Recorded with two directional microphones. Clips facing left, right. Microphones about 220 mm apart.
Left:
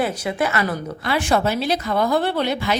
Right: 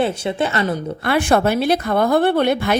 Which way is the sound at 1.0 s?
55° right (ahead or behind).